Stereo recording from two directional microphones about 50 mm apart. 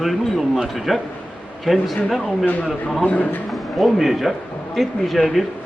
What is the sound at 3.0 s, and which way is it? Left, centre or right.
Speech, left.